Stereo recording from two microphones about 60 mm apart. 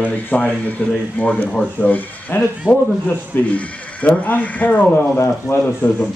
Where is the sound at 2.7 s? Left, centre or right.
Centre.